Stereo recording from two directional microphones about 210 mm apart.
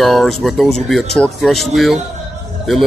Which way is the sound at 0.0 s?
Centre (ahead or behind).